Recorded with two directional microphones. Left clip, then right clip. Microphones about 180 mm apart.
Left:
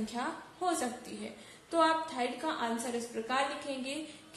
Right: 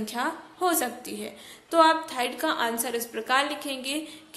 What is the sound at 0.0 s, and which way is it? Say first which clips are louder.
A woman's voice: right 7 dB; 35° right (ahead or behind).